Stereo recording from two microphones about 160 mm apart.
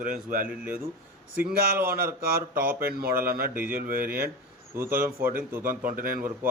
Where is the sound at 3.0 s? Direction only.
70° right (ahead or behind).